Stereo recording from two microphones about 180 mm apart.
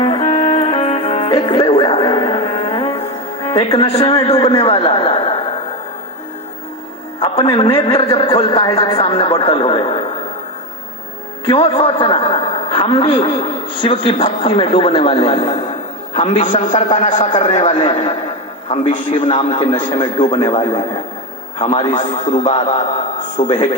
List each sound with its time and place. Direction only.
0.0 s music: 25° left (ahead or behind)
3.4 s a man's voice: 30° left (ahead or behind)
7.2 s a man's voice: 25° left (ahead or behind)
11.4 s a man's voice: 30° left (ahead or behind)